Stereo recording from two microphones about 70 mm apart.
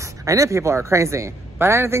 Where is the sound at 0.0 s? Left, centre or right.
Right.